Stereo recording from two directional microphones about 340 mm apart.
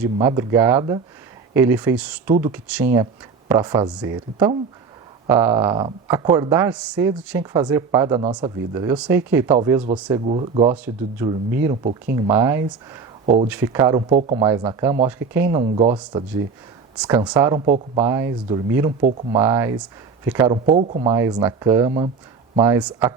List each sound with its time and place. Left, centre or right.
0.0 s speech: centre
17.0 s speech: centre
19.4 s speech: centre